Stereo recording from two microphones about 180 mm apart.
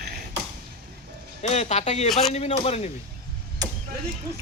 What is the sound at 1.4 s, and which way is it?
Speech, 40° left (ahead or behind).